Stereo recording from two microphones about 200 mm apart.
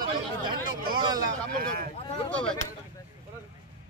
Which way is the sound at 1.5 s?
45° right (ahead or behind).